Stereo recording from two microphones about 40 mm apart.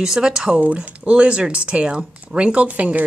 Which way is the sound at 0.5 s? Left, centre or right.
Right.